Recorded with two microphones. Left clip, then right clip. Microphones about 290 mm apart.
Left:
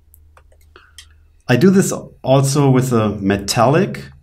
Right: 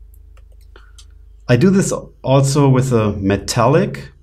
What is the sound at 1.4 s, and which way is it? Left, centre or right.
Speech, right.